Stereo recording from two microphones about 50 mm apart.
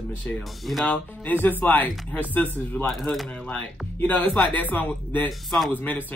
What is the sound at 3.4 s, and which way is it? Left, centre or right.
Speech, left.